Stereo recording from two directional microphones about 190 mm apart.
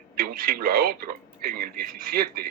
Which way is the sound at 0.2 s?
50° right (ahead or behind).